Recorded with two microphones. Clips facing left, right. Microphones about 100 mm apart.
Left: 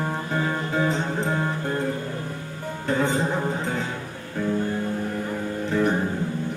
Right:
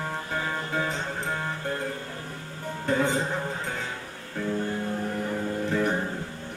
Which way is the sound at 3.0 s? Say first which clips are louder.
Left 3 dB; 25° left (ahead or behind).